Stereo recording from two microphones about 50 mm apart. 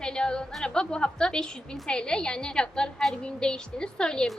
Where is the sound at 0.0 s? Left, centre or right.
Centre.